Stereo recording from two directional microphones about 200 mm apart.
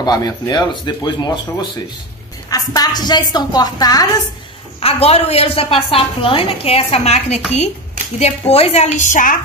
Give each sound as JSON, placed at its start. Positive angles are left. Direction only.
{"t": 0.0, "sound": "a woman's voice", "side_deg": 20}
{"t": 4.7, "sound": "a woman's voice", "side_deg": 30}